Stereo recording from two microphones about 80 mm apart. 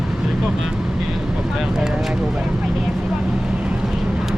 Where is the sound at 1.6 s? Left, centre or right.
Centre.